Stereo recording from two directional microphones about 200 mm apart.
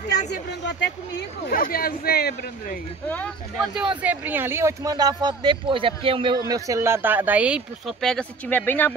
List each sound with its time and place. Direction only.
0.3 s speech: 60° left (ahead or behind)
4.0 s speech: 10° right (ahead or behind); by 8.9 s 10° left (ahead or behind)